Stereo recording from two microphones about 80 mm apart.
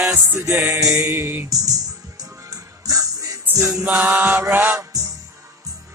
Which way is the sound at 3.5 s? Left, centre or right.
Right.